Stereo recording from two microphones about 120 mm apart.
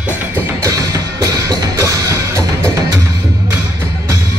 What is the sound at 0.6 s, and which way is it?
Music, 30° right (ahead or behind).